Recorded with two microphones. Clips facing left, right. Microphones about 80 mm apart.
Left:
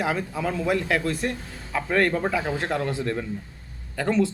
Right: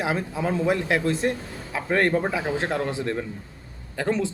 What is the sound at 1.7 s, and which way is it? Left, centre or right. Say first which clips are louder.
Speech: even; centre.